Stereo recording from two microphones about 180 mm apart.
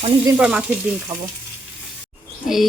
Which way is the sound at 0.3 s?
5° right (ahead or behind).